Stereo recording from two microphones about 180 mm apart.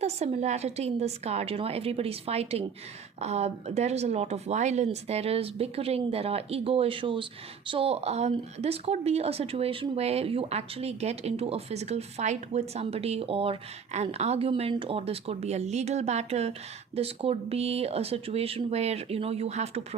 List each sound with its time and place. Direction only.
0.0 s speech: 35° right (ahead or behind)